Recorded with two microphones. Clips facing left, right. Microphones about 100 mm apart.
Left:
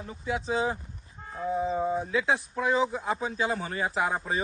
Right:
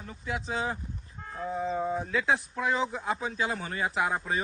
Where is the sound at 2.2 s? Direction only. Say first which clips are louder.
Left 1 dB; 30° left (ahead or behind).